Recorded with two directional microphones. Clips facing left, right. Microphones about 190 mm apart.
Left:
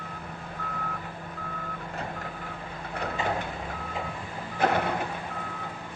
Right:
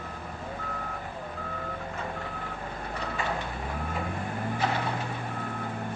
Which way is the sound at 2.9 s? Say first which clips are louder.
Left 3 dB; 55° left (ahead or behind).